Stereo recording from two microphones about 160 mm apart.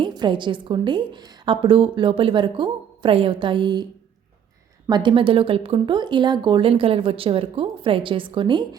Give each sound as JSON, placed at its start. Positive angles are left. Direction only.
{"t": 0.0, "sound": "speech", "side_deg": -30}
{"t": 4.9, "sound": "speech", "side_deg": -30}